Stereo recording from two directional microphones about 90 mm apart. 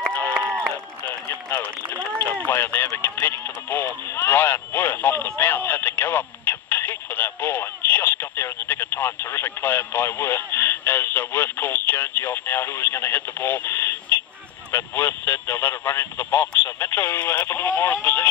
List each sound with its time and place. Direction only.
0.3 s crowd: 30° right (ahead or behind)
1.3 s speech: 20° left (ahead or behind)
3.0 s radio: 25° left (ahead or behind)
14.7 s speech: 25° left (ahead or behind)